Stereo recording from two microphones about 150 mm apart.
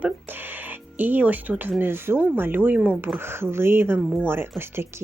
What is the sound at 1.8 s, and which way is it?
Speech, 15° right (ahead or behind).